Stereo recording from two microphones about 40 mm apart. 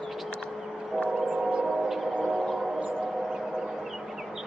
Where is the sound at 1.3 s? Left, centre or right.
Right.